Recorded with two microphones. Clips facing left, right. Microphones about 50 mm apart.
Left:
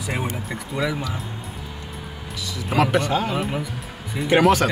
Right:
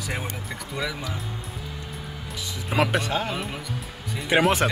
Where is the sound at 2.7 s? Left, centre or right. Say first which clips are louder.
Left 4 dB; centre.